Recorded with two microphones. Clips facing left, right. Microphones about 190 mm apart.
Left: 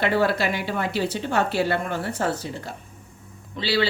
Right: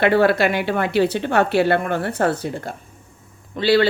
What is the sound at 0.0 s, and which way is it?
Speech, 65° right (ahead or behind).